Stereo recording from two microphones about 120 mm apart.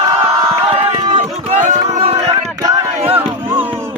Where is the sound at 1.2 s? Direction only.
90° right.